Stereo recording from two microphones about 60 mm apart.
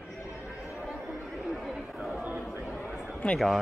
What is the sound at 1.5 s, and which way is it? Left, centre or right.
Chatter, centre.